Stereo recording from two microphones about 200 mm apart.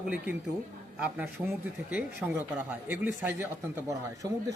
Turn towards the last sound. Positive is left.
turn(degrees=-15)  # may be behind; listen again after turning